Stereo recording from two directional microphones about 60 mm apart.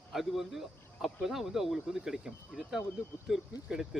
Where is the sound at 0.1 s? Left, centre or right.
Centre.